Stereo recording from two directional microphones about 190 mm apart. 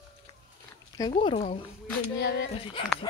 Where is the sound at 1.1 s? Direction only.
30° left (ahead or behind).